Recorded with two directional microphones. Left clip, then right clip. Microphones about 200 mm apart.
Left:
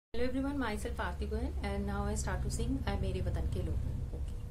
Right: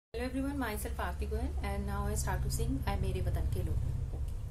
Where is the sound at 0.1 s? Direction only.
5° left (ahead or behind).